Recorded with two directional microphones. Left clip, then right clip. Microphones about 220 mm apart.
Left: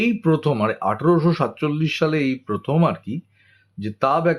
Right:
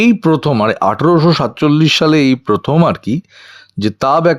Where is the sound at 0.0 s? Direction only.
50° right (ahead or behind).